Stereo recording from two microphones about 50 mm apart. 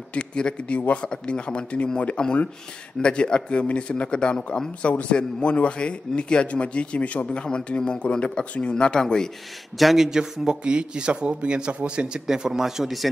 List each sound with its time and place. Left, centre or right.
0.1 s a man's voice: left
9.8 s speech: centre
10.0 s a man's voice: centre
12.3 s speech: centre